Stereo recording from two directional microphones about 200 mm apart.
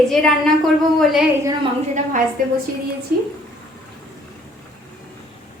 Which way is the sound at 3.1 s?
50° right (ahead or behind).